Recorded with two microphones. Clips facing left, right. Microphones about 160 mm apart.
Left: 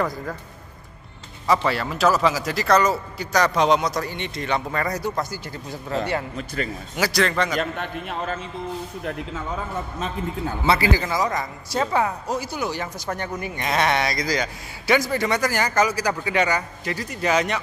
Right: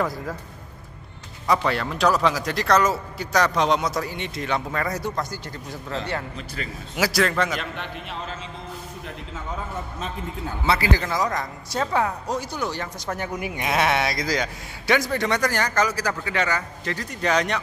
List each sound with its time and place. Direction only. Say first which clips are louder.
0.0 s speech: left 1 dB; centre (ahead or behind)
1.5 s speech: left 1 dB; centre (ahead or behind)
6.3 s a man's voice: left 5 dB; 45° left (ahead or behind)
7.0 s speech: even; 5° right (ahead or behind)
7.5 s a man's voice: left 5 dB; 45° left (ahead or behind)
11.0 s speech: left 1 dB; 5° left (ahead or behind)
13.1 s speech: right 1 dB; 10° right (ahead or behind)